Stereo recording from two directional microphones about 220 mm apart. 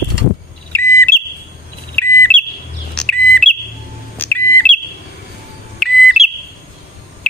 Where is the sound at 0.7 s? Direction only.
10° left (ahead or behind).